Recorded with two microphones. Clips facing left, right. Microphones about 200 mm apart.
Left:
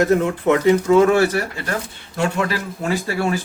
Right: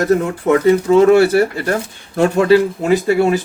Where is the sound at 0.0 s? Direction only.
35° right (ahead or behind).